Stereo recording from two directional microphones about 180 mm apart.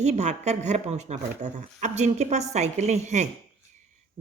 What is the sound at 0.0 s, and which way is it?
A woman's voice, 40° right (ahead or behind).